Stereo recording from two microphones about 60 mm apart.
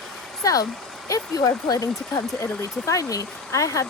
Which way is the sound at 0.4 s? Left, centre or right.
Left.